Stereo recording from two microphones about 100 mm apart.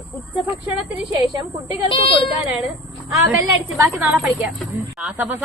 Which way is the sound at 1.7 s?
55° left (ahead or behind).